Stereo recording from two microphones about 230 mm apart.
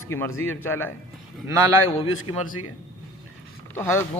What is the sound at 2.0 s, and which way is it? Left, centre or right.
Speech, left.